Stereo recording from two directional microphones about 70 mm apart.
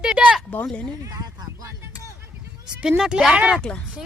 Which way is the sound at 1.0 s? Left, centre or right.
Right.